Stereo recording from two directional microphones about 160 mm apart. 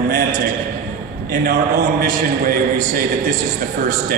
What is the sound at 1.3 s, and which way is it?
A man's voice, 65° right (ahead or behind).